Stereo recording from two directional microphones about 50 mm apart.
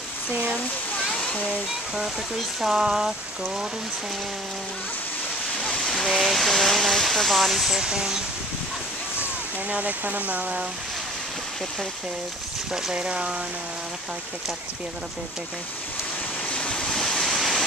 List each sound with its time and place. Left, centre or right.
0.9 s waterfall: left
2.6 s speech: centre
5.7 s speech: centre
6.0 s speech: centre
7.8 s speech: centre
9.7 s speech: right
12.9 s speech: centre
16.4 s waves: left
16.9 s waves: centre